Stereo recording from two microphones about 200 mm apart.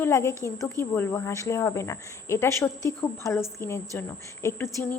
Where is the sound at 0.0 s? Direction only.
15° left (ahead or behind).